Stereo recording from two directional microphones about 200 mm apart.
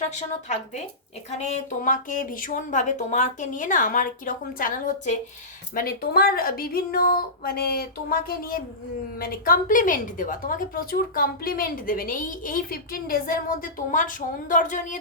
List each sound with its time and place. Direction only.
0.0 s a woman's voice: 35° left (ahead or behind)